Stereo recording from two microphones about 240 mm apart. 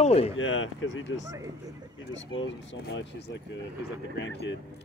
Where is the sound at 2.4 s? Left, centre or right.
Left.